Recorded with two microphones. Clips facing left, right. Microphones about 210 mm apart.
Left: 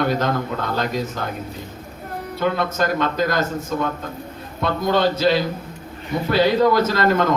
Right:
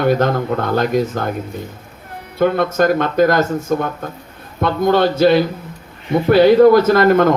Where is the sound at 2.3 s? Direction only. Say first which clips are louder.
Right 7 dB; 50° right (ahead or behind).